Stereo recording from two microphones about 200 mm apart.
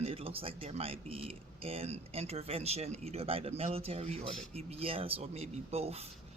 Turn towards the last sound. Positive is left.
turn(degrees=-30)  # may be behind; listen again after turning